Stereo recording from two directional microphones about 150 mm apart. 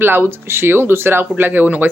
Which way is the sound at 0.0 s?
15° right (ahead or behind).